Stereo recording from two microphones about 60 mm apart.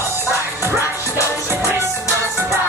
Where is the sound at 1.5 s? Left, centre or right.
Right.